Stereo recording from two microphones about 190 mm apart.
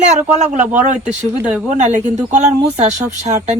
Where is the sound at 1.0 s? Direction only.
5° right (ahead or behind).